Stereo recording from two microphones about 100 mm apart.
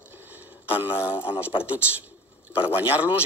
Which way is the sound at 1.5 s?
55° left (ahead or behind).